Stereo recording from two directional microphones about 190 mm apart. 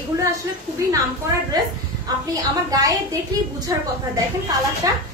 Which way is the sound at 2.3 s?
20° right (ahead or behind).